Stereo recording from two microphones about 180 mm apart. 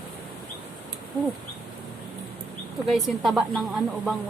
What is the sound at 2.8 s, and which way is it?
Speech, centre (ahead or behind).